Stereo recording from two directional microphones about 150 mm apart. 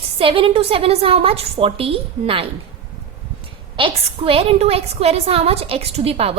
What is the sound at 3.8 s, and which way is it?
A woman's voice, 40° right (ahead or behind).